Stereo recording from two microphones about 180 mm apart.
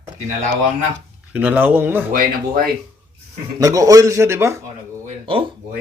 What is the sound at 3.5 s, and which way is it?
Speech, 20° right (ahead or behind).